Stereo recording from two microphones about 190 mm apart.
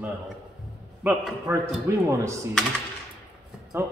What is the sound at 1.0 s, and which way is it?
Dishes, 10° right (ahead or behind).